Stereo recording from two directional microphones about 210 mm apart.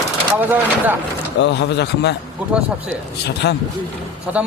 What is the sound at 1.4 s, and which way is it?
Speech, 55° left (ahead or behind).